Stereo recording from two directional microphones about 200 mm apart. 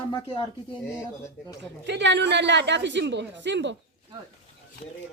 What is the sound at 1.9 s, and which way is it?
A woman's voice, 60° right (ahead or behind).